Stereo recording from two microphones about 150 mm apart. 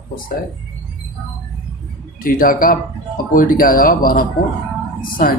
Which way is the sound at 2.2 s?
70° left (ahead or behind).